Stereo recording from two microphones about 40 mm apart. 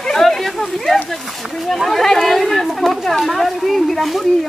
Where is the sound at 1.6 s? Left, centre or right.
Centre.